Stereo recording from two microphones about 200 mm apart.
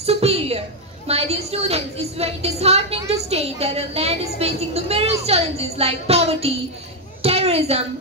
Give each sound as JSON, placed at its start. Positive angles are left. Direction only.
{"t": 0.0, "sound": "a woman's voice", "side_deg": -30}